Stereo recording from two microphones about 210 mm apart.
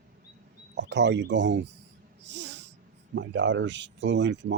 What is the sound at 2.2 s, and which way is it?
Snort, 55° right (ahead or behind).